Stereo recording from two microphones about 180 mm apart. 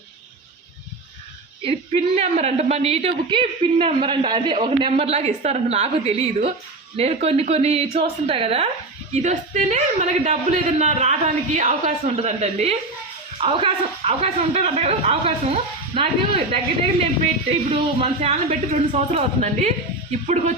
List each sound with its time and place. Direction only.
1.6 s a woman's voice: 35° right (ahead or behind)
17.7 s a woman's voice: 35° right (ahead or behind)